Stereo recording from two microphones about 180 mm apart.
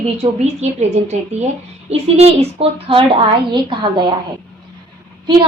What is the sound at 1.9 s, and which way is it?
A woman's voice, 35° right (ahead or behind).